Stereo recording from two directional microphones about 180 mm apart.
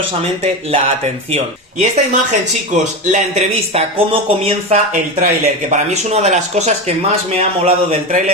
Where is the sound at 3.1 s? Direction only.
35° right (ahead or behind).